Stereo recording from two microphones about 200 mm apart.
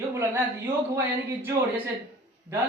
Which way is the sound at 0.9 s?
10° right (ahead or behind).